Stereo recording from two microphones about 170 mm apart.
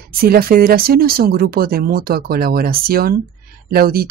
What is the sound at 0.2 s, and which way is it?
Speech, 60° right (ahead or behind).